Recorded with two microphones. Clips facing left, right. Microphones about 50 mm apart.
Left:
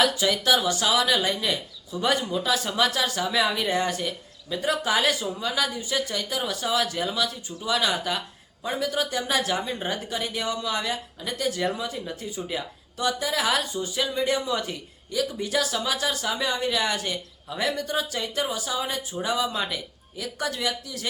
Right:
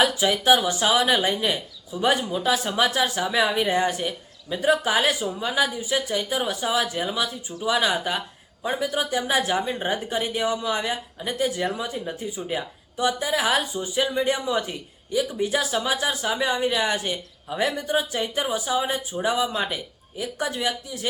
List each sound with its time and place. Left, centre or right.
0.0 s speech: right